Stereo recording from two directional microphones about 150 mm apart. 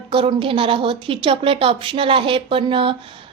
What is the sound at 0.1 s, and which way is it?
A woman's voice, 35° right (ahead or behind).